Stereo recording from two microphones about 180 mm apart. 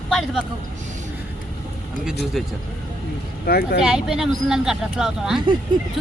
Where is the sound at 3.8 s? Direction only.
5° right (ahead or behind).